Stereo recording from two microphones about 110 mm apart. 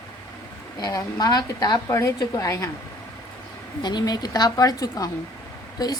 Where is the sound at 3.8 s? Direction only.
40° left (ahead or behind).